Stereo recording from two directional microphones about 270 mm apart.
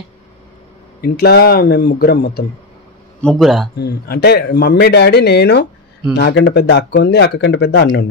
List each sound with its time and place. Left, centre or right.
1.0 s speech: left
3.2 s speech: centre
3.7 s speech: left